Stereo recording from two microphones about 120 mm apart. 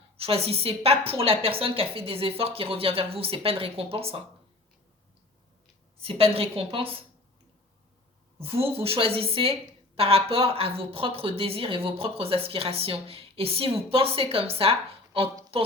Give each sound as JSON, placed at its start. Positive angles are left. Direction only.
{"t": 0.2, "sound": "a woman's voice", "side_deg": -55}
{"t": 6.0, "sound": "a woman's voice", "side_deg": -55}
{"t": 8.4, "sound": "a woman's voice", "side_deg": -55}